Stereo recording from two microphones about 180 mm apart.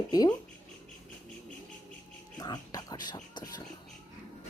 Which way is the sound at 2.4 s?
20° left (ahead or behind).